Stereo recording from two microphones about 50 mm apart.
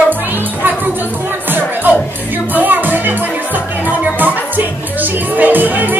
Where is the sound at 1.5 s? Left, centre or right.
Right.